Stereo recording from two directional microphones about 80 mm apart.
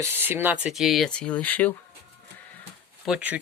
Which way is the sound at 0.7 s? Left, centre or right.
Centre.